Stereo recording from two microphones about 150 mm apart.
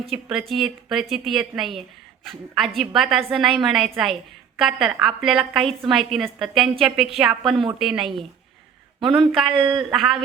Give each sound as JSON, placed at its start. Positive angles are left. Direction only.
{"t": 0.1, "sound": "a woman's voice", "side_deg": 0}
{"t": 2.9, "sound": "a woman's voice", "side_deg": 0}
{"t": 9.5, "sound": "speech", "side_deg": -30}
{"t": 9.9, "sound": "a woman's voice", "side_deg": 0}